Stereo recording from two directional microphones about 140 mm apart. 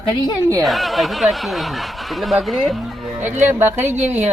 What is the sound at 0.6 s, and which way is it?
Speech, centre (ahead or behind).